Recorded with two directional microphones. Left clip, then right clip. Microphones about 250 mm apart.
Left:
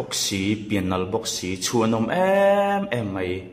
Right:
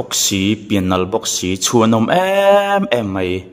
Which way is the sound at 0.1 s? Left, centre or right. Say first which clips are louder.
Right 9 dB; right.